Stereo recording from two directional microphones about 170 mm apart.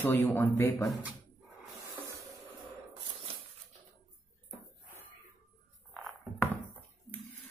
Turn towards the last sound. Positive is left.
turn(degrees=5)  # may be behind; listen again after turning